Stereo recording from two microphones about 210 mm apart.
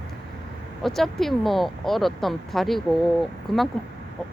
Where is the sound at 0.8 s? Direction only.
Centre (ahead or behind).